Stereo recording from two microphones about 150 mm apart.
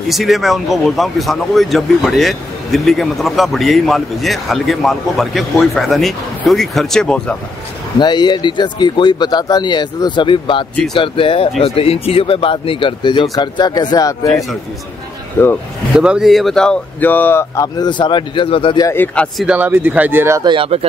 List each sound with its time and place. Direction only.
0.1 s speech: centre (ahead or behind)
8.0 s speech: 30° left (ahead or behind)
15.4 s speech: 15° left (ahead or behind)
16.0 s speech: 5° right (ahead or behind); by 18.9 s 35° left (ahead or behind)
18.9 s speech: 15° left (ahead or behind)
19.3 s speech: 5° right (ahead or behind)
20.4 s speech: 35° right (ahead or behind)